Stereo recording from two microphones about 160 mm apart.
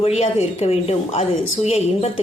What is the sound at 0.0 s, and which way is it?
A woman's voice, 40° left (ahead or behind).